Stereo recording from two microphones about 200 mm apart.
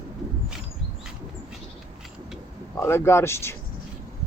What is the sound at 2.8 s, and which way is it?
Speech, 10° left (ahead or behind).